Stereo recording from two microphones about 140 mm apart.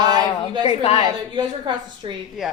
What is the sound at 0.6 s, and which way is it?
Speech, 50° left (ahead or behind).